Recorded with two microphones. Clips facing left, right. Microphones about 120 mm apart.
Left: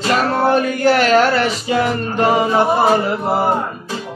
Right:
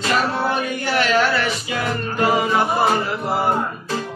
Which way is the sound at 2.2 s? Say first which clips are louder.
Left 3 dB; 30° left (ahead or behind).